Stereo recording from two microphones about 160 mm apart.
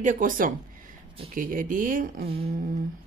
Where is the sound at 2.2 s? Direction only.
35° right (ahead or behind).